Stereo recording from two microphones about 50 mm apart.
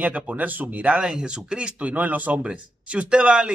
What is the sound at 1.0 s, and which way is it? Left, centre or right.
Speech, centre.